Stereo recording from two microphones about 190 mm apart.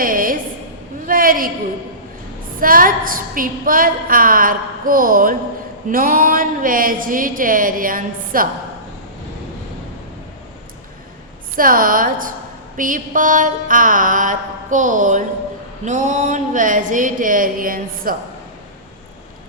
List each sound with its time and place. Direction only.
0.0 s a sound: 45° right (ahead or behind)
2.6 s a woman's voice: 50° right (ahead or behind)
11.5 s a woman's voice: 50° right (ahead or behind)